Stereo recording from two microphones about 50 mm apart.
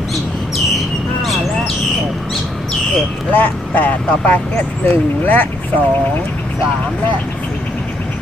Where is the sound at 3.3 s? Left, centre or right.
Left.